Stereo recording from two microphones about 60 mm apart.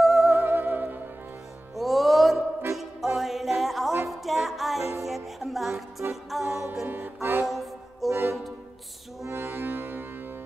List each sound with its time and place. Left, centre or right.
0.0 s music: centre
0.3 s music: right
1.8 s music: centre
7.2 s music: right
7.4 s music: centre
8.1 s music: right